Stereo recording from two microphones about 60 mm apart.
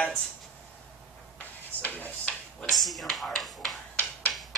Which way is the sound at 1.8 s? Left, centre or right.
Left.